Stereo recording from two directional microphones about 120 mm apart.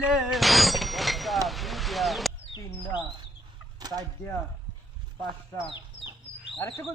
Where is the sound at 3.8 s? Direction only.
35° right (ahead or behind).